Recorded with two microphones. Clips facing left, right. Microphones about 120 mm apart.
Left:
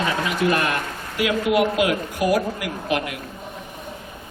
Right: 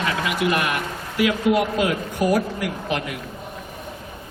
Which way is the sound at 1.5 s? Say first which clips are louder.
Even; 25° right (ahead or behind).